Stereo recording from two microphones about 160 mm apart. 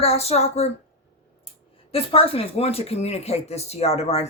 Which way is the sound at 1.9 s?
35° left (ahead or behind).